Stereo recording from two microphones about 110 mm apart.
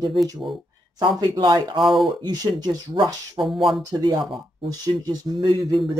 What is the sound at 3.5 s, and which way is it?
Speech, centre (ahead or behind).